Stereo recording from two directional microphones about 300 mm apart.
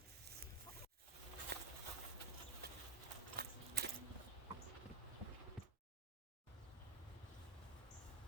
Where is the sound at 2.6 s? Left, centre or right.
Right.